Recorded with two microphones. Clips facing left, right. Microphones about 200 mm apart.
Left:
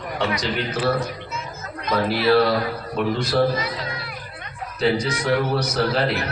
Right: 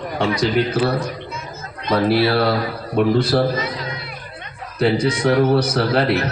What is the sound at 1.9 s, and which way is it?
A man's voice, 30° right (ahead or behind).